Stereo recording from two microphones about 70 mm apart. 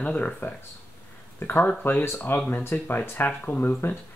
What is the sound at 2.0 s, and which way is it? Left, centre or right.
Speech, left.